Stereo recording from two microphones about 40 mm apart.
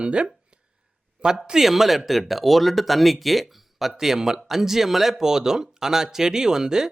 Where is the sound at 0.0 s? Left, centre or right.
Right.